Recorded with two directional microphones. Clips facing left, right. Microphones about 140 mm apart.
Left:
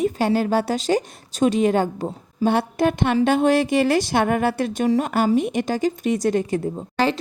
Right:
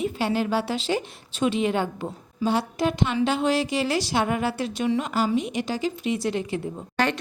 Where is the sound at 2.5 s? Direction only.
55° left (ahead or behind).